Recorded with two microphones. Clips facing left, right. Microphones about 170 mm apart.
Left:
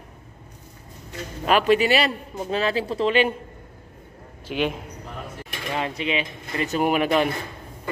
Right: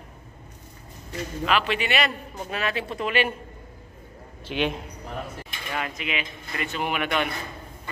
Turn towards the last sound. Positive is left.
turn(degrees=35)  # may be behind; listen again after turning